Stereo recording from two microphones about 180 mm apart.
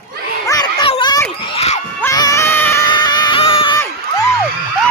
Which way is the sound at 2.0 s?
20° left (ahead or behind).